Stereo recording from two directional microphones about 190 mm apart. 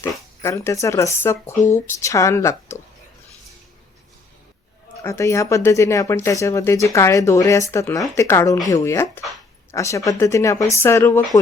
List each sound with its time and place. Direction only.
0.0 s speech: 15° left (ahead or behind)
5.0 s speech: 15° left (ahead or behind)